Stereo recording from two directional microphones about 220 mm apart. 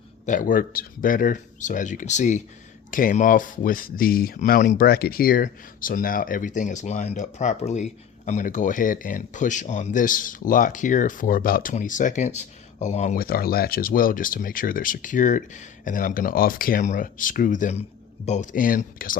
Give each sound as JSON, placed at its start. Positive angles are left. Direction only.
{"t": 0.3, "sound": "speech", "side_deg": 35}